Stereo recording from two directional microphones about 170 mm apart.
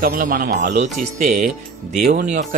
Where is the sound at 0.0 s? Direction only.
55° right (ahead or behind).